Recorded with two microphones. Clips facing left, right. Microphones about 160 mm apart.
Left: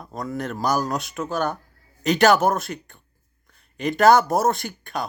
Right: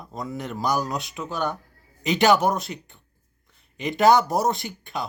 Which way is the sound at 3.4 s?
20° right (ahead or behind).